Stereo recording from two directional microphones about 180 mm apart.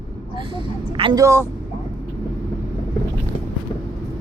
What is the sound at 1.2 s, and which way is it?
Speech, 15° right (ahead or behind).